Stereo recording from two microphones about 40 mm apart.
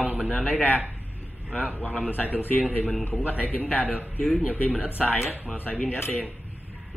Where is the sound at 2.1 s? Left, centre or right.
Left.